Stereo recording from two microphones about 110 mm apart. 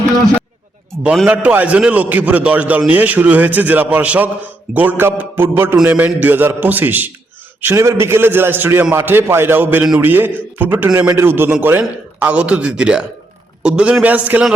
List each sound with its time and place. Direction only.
1.3 s a man's voice: 15° right (ahead or behind)